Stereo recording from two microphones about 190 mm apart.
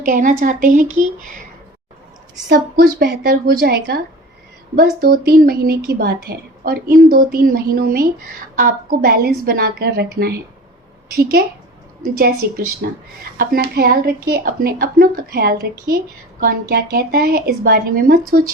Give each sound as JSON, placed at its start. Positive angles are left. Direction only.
{"t": 0.0, "sound": "a woman's voice", "side_deg": -45}
{"t": 2.5, "sound": "a woman's voice", "side_deg": -55}